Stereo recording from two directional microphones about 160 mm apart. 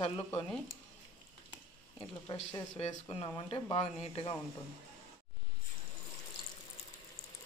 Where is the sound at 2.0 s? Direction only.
25° left (ahead or behind).